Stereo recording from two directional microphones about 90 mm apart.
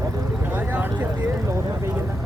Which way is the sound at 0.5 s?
20° right (ahead or behind).